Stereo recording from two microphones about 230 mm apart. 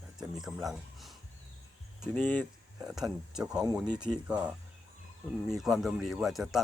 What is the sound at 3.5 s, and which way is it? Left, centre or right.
Speech, centre.